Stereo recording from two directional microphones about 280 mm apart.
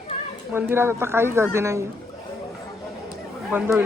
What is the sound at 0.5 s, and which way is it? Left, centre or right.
Speech, centre.